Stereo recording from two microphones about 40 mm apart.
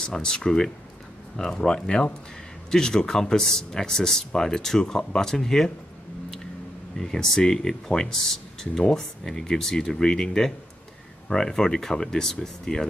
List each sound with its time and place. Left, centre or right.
0.0 s speech: centre
7.0 s speech: centre